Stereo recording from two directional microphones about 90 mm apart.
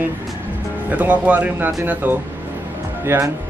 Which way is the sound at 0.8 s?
15° right (ahead or behind).